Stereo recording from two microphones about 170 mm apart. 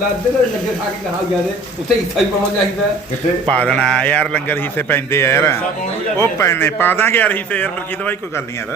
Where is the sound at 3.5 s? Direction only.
5° left (ahead or behind).